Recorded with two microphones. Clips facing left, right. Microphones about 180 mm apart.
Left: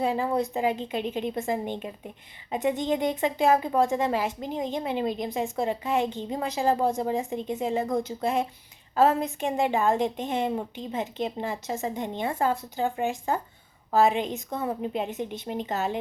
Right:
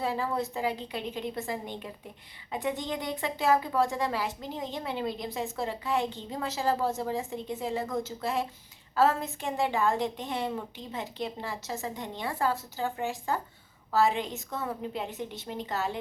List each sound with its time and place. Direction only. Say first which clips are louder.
0.0 s a woman's voice: left 5 dB; 20° left (ahead or behind)